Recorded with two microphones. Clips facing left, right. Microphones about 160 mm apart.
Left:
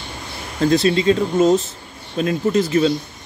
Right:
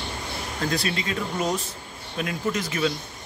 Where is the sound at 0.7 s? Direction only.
25° left (ahead or behind).